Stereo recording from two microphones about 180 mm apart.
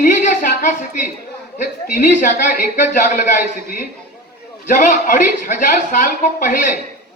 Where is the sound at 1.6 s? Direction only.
45° left (ahead or behind).